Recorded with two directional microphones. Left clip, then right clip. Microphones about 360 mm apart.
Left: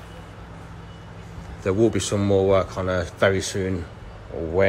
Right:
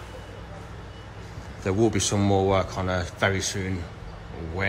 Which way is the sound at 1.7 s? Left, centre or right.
Centre.